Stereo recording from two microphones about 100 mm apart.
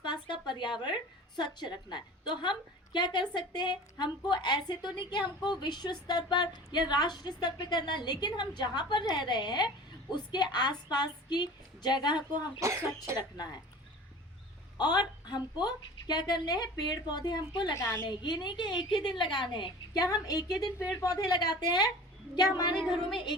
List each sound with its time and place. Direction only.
0.0 s a woman's voice: 50° left (ahead or behind)
12.5 s speech: 30° right (ahead or behind)
13.1 s a woman's voice: 40° left (ahead or behind)
14.8 s a woman's voice: 45° left (ahead or behind)